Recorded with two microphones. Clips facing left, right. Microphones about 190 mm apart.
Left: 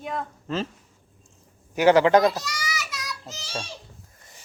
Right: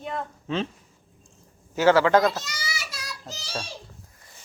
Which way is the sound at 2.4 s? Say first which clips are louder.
Left 3 dB; 25° right (ahead or behind).